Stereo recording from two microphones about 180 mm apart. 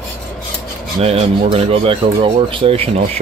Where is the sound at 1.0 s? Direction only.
35° right (ahead or behind).